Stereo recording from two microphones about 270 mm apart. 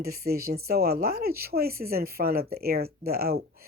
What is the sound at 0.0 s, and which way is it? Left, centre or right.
Speech, right.